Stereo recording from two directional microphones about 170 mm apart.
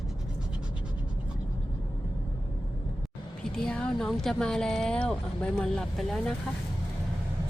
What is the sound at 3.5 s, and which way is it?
Speech, 5° left (ahead or behind).